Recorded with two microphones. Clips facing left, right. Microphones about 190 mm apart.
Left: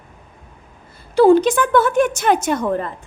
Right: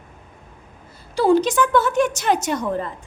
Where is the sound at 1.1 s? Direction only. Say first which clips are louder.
Left 5 dB; 55° left (ahead or behind).